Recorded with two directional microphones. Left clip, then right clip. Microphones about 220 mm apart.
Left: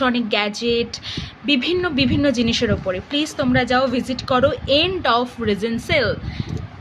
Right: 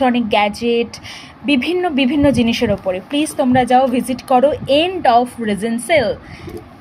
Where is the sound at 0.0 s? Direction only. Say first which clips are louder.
Right 4 dB; 35° left (ahead or behind).